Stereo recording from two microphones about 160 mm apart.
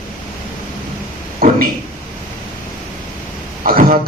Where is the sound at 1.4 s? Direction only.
65° right (ahead or behind).